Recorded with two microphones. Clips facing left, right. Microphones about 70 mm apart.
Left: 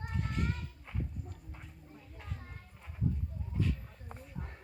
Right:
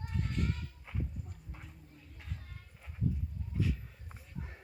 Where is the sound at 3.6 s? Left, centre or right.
Centre.